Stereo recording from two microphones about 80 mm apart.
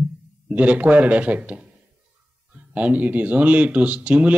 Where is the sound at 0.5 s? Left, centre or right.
Centre.